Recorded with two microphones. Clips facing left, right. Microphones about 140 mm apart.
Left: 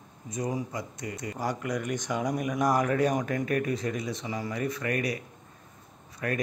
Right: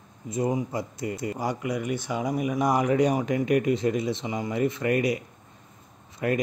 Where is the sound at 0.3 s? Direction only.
25° right (ahead or behind).